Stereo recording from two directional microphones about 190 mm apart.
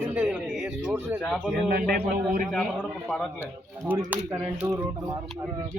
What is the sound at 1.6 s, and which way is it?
Speech, 50° right (ahead or behind).